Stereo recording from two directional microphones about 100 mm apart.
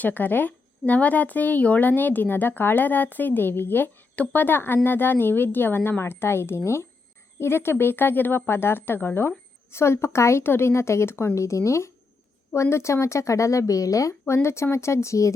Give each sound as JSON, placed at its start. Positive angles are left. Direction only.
{"t": 0.0, "sound": "speech", "side_deg": 20}